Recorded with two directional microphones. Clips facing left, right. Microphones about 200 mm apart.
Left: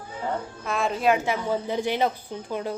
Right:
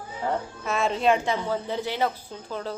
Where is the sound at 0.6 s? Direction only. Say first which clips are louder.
Even; centre (ahead or behind).